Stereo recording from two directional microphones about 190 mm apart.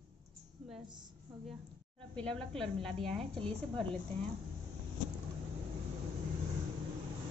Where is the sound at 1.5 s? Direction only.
5° left (ahead or behind).